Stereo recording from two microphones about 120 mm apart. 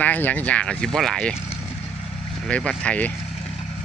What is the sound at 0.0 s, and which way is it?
Speech, 15° left (ahead or behind).